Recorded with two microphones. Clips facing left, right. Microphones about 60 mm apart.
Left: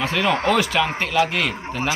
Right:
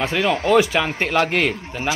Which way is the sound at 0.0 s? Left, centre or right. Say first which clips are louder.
Even; centre.